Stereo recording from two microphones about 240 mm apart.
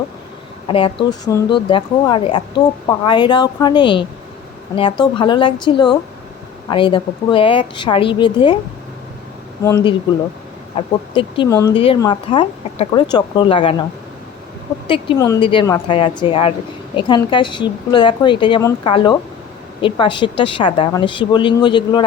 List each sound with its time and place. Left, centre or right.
0.7 s speech: left
9.6 s speech: centre
14.8 s speech: centre